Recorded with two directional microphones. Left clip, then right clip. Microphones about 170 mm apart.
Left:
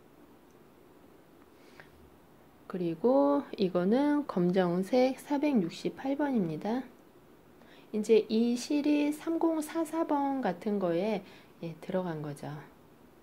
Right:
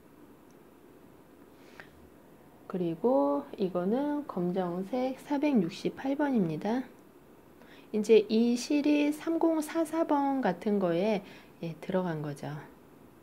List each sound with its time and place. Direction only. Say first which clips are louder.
2.6 s speech: right 1 dB; 5° right (ahead or behind)
3.0 s speech: left 1 dB; 10° left (ahead or behind); by 5.1 s 30° left (ahead or behind)
5.1 s speech: right 1 dB; 5° left (ahead or behind)
7.9 s speech: right 2 dB; 5° right (ahead or behind)